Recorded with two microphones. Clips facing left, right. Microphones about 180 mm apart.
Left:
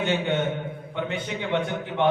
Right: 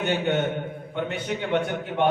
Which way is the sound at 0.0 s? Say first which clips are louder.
Right 1 dB; 50° right (ahead or behind).